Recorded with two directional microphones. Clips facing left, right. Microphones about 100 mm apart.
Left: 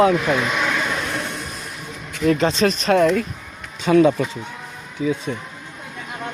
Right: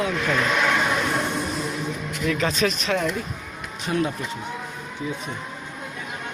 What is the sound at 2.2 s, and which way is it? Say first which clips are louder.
Speech: left 6 dB; 35° left (ahead or behind).